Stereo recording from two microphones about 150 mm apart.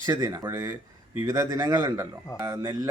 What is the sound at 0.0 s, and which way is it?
A man's voice, 20° right (ahead or behind).